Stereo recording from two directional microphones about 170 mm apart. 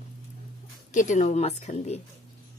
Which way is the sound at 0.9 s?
45° left (ahead or behind).